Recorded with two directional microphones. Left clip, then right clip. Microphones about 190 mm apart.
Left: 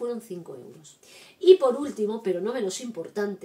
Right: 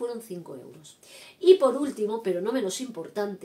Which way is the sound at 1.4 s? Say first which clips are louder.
Left 1 dB; 20° right (ahead or behind).